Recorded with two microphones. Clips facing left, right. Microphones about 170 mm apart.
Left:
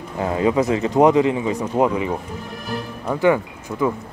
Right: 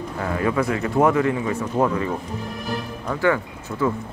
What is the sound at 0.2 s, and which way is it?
Speech, 20° left (ahead or behind).